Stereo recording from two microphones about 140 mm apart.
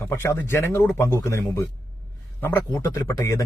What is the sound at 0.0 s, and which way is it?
A man's voice, 20° left (ahead or behind).